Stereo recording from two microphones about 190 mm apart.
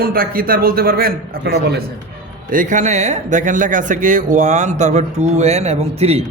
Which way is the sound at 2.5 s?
40° right (ahead or behind).